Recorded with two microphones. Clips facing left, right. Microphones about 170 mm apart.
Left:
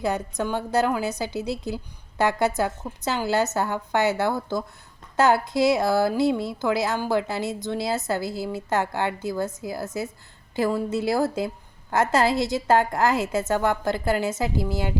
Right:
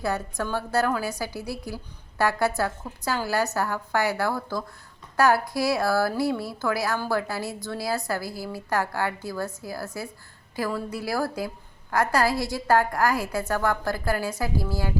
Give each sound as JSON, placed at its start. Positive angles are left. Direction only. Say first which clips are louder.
{"t": 0.0, "sound": "a woman's voice", "louder": "left 2 dB", "side_deg": 20}